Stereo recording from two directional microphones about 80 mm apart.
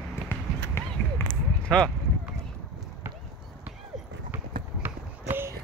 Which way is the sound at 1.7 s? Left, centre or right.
Centre.